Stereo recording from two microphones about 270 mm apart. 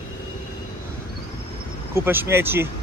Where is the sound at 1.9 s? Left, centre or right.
Centre.